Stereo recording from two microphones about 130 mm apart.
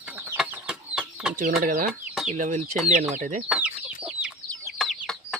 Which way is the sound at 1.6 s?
85° right.